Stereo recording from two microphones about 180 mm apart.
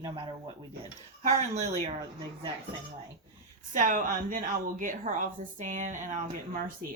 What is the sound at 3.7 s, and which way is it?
A woman's voice, 45° right (ahead or behind).